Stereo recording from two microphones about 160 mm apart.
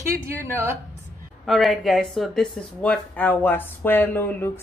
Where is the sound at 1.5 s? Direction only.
Centre (ahead or behind).